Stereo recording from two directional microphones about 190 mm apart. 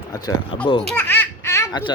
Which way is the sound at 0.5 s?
25° left (ahead or behind).